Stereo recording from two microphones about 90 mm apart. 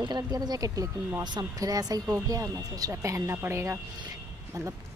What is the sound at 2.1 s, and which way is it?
Speech, 35° right (ahead or behind).